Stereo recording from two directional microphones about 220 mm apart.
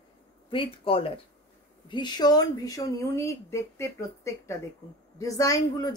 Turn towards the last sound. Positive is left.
turn(degrees=15)  # may be behind; listen again after turning